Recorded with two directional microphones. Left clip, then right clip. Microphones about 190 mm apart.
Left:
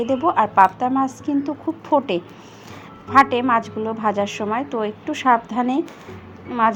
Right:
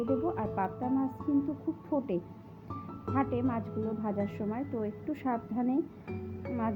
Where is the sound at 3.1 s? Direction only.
10° left (ahead or behind).